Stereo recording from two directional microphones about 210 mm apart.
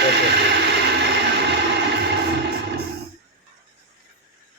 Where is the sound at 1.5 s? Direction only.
55° right (ahead or behind).